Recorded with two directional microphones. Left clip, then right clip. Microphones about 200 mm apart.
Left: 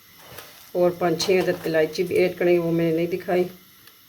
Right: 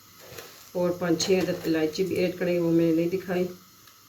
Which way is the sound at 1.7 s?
60° left (ahead or behind).